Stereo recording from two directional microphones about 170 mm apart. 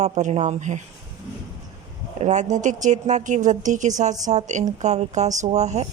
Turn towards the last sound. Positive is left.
turn(degrees=-40)  # may be behind; listen again after turning